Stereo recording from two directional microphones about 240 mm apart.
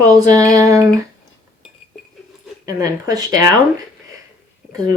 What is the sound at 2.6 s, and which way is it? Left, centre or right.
Speech, centre.